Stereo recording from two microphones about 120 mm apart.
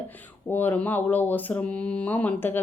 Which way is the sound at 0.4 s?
15° left (ahead or behind).